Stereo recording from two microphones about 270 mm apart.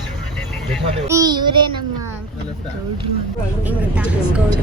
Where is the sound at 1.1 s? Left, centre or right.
Centre.